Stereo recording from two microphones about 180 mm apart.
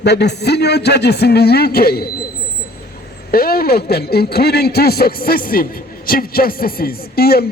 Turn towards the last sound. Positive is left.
turn(degrees=60)  # may be behind; listen again after turning